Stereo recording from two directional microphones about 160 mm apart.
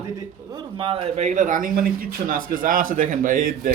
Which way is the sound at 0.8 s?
35° right (ahead or behind).